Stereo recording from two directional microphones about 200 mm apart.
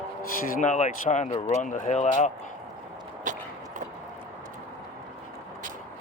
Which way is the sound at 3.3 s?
40° right (ahead or behind).